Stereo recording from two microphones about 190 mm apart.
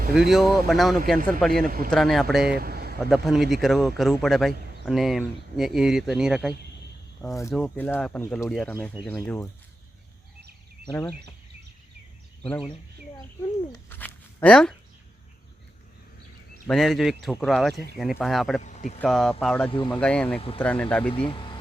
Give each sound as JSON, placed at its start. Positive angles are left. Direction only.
{"t": 0.1, "sound": "speech", "side_deg": -5}
{"t": 1.6, "sound": "speech", "side_deg": -50}
{"t": 1.9, "sound": "speech", "side_deg": 0}
{"t": 2.6, "sound": "a sound", "side_deg": -55}
{"t": 3.1, "sound": "speech", "side_deg": 0}
{"t": 12.4, "sound": "speech", "side_deg": 5}
{"t": 13.7, "sound": "a sound", "side_deg": 10}
{"t": 16.6, "sound": "speech", "side_deg": 0}
{"t": 18.6, "sound": "speech", "side_deg": 40}
{"t": 18.9, "sound": "speech", "side_deg": 0}
{"t": 21.1, "sound": "speech", "side_deg": 25}